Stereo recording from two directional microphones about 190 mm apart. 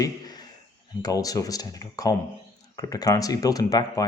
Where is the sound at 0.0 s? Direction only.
20° left (ahead or behind).